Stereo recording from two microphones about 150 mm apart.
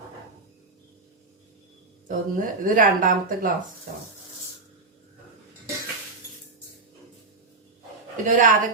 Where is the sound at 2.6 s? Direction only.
65° right (ahead or behind).